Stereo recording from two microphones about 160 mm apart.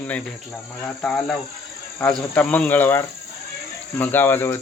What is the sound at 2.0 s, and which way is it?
Speech, 10° left (ahead or behind).